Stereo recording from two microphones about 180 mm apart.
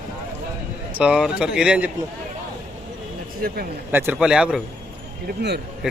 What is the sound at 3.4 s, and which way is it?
Speech, 55° right (ahead or behind).